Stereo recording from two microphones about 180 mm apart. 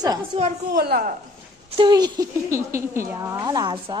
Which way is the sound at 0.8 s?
55° right (ahead or behind).